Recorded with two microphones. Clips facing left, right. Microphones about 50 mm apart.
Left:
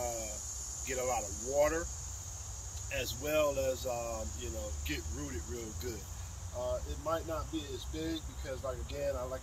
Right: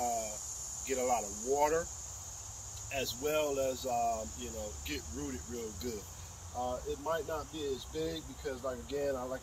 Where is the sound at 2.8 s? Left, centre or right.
Centre.